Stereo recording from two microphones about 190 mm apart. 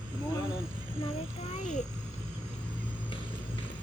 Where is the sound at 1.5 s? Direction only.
40° left (ahead or behind).